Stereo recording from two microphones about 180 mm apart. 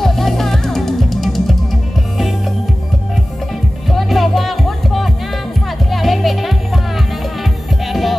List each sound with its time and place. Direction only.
0.0 s music: centre (ahead or behind)
3.9 s music: centre (ahead or behind)
7.9 s music: centre (ahead or behind)